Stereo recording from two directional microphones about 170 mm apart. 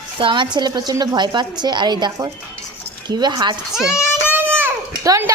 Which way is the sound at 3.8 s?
5° right (ahead or behind).